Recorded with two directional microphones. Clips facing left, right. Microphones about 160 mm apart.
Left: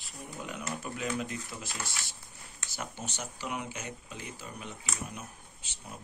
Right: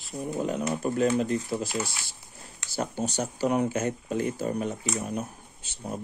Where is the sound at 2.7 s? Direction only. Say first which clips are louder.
Right 11 dB; 35° right (ahead or behind).